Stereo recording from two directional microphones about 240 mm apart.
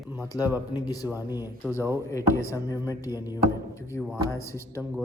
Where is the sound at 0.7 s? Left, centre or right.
Centre.